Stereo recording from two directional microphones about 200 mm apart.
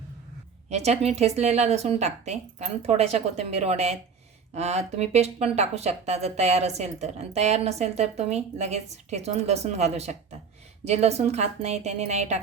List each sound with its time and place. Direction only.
0.7 s speech: 30° right (ahead or behind)